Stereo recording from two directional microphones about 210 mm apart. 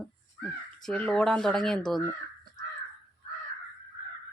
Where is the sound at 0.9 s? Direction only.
5° left (ahead or behind).